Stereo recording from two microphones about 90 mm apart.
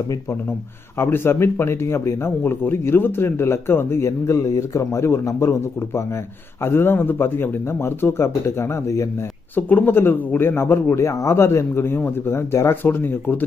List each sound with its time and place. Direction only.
0.9 s speech: 25° left (ahead or behind)
9.6 s speech: 20° left (ahead or behind)